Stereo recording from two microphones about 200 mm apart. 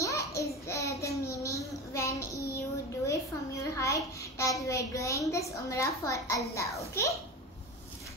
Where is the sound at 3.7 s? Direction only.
15° left (ahead or behind).